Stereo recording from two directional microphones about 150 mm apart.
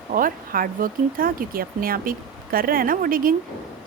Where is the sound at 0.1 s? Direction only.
70° right (ahead or behind).